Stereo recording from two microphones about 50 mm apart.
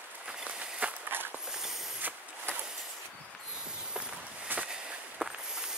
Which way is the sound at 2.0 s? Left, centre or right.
Right.